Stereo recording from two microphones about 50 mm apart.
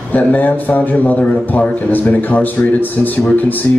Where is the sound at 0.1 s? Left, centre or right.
Left.